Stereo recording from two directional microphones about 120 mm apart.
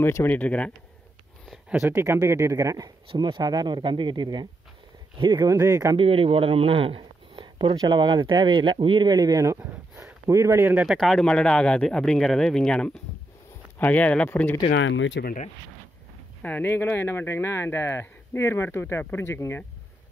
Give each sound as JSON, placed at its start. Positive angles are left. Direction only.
{"t": 0.0, "sound": "speech", "side_deg": 20}
{"t": 1.7, "sound": "speech", "side_deg": -20}
{"t": 3.1, "sound": "speech", "side_deg": -45}
{"t": 5.9, "sound": "speech", "side_deg": -50}
{"t": 10.9, "sound": "speech", "side_deg": 0}
{"t": 16.4, "sound": "speech", "side_deg": 15}